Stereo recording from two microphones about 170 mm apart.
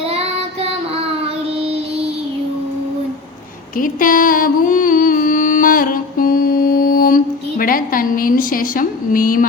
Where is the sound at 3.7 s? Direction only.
55° left (ahead or behind).